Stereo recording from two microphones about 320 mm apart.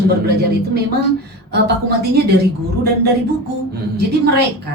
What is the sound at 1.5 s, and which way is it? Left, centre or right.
Speech, right.